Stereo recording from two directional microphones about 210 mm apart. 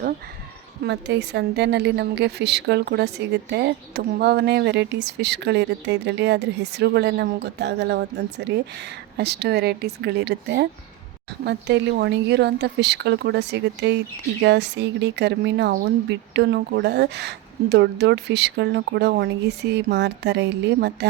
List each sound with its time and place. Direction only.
0.9 s a woman's voice: 55° right (ahead or behind)